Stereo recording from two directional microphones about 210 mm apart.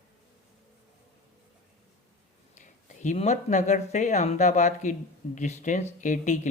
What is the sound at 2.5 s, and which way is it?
Speech, 35° left (ahead or behind).